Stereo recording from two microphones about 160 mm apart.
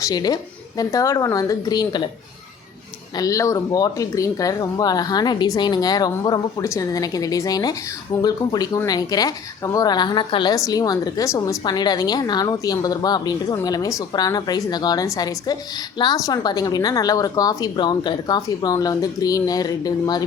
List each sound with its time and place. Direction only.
0.0 s speech: 25° left (ahead or behind)
3.2 s speech: 20° left (ahead or behind)